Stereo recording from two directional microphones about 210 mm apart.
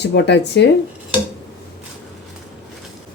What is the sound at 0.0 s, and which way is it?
Speech, 55° left (ahead or behind).